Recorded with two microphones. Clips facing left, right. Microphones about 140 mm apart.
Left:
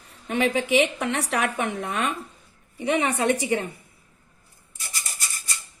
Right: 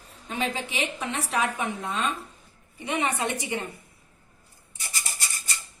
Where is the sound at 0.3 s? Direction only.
70° left (ahead or behind).